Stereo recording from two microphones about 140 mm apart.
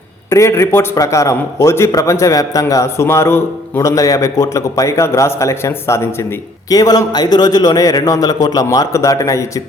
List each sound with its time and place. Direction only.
0.3 s a man's voice: 20° left (ahead or behind)